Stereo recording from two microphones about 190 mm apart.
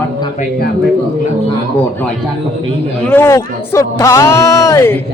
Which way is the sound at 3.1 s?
10° left (ahead or behind).